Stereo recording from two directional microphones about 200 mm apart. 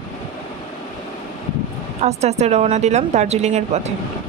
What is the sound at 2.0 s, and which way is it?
A woman's voice, 30° right (ahead or behind).